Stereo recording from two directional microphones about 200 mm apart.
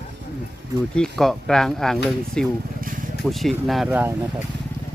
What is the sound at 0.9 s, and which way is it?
Speech, centre (ahead or behind).